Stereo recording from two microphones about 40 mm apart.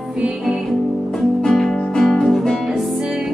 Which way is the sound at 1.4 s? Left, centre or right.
Centre.